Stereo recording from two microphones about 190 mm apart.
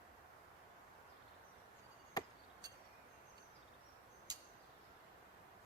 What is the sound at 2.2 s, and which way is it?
Chop, 20° left (ahead or behind).